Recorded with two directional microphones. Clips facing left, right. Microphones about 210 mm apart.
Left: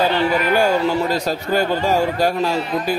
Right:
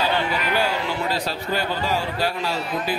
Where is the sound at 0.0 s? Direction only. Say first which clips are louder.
Left 6 dB; 45° left (ahead or behind).